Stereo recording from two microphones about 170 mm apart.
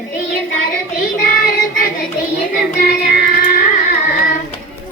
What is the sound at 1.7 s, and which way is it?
Child singing, 60° left (ahead or behind).